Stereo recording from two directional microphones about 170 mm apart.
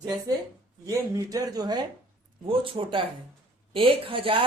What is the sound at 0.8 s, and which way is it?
A woman's voice, 20° right (ahead or behind).